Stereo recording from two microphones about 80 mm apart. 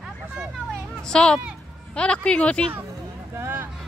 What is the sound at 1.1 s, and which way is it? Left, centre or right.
Speech, centre.